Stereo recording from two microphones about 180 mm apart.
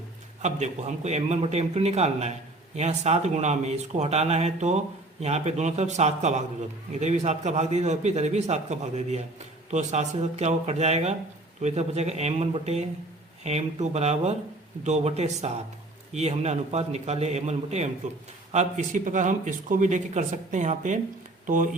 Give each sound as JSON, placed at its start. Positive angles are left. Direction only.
{"t": 0.4, "sound": "a man's voice", "side_deg": -40}